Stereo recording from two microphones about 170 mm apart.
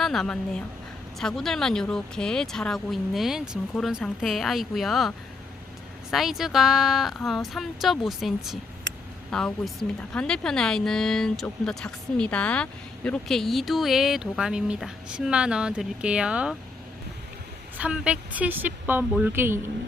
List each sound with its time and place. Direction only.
0.0 s speech: centre (ahead or behind)
17.7 s a woman's voice: 5° right (ahead or behind)